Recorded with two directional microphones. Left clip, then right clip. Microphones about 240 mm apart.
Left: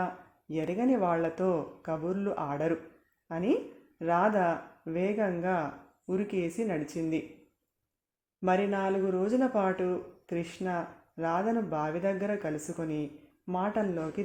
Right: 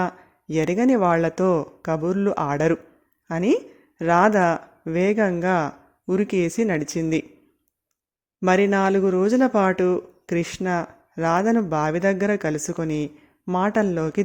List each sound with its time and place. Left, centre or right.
0.0 s speech: right
8.4 s speech: right